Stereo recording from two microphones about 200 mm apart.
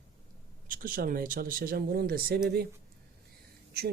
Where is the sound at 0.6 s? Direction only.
45° right (ahead or behind).